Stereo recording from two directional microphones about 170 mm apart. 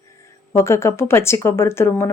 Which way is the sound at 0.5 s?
15° left (ahead or behind).